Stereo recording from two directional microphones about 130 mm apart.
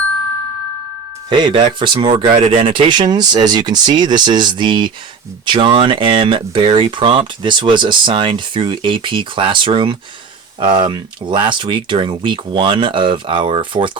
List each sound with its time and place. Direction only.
1.3 s speech: 35° right (ahead or behind)